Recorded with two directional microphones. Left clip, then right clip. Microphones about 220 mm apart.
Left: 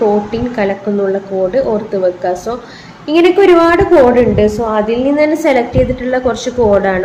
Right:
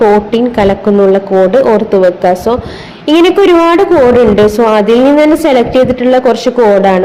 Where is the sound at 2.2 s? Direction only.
30° right (ahead or behind).